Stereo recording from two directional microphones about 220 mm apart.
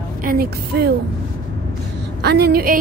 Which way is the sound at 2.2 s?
50° right (ahead or behind).